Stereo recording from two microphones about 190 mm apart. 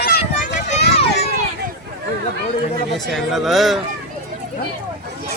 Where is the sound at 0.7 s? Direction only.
35° left (ahead or behind).